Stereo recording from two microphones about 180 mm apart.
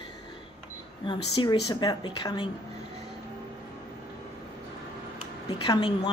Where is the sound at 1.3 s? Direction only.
25° left (ahead or behind).